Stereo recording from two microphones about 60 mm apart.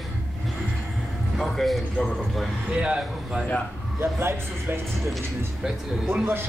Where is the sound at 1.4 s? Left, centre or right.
Centre.